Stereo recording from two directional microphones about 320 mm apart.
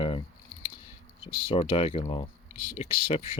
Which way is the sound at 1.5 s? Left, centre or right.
Centre.